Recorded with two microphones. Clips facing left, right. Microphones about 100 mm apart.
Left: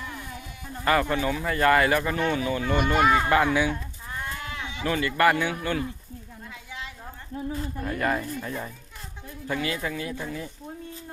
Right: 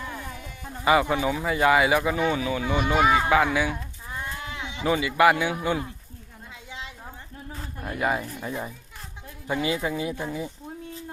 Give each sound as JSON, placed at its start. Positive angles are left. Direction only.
{"t": 0.0, "sound": "a sound", "side_deg": -30}
{"t": 0.9, "sound": "speech", "side_deg": -10}
{"t": 4.1, "sound": "sheep", "side_deg": -15}
{"t": 7.8, "sound": "speech", "side_deg": -10}